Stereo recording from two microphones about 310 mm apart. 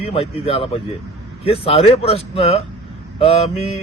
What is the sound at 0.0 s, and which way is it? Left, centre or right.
A man's voice, centre.